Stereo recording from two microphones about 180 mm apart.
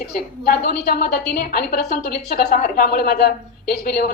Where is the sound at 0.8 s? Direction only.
50° left (ahead or behind).